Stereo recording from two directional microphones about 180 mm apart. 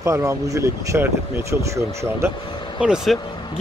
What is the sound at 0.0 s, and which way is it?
Speech, 15° right (ahead or behind).